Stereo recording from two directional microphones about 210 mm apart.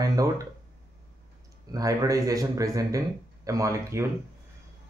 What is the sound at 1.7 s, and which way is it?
Speech, 15° right (ahead or behind).